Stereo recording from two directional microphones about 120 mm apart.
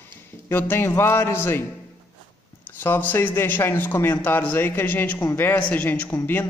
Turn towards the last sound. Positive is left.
turn(degrees=20)  # may be behind; listen again after turning